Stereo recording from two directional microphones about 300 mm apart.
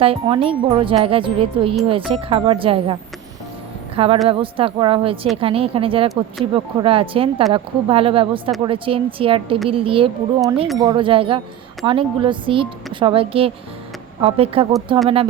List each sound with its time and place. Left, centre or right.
0.0 s a woman's voice: centre